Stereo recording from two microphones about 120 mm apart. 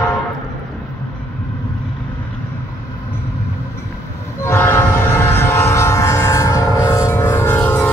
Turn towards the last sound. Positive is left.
turn(degrees=15)  # may be behind; listen again after turning